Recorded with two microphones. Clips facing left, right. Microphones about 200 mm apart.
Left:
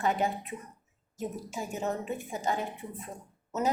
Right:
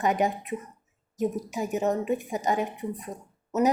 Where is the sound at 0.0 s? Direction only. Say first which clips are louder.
Right 4 dB; 15° right (ahead or behind).